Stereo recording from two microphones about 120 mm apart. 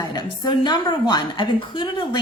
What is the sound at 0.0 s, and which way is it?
A woman's voice, 35° left (ahead or behind).